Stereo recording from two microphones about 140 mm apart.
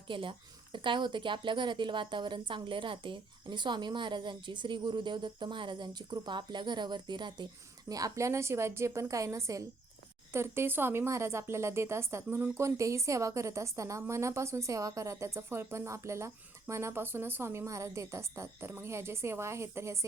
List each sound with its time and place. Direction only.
0.1 s a woman's voice: 35° right (ahead or behind); by 20.1 s 20° right (ahead or behind)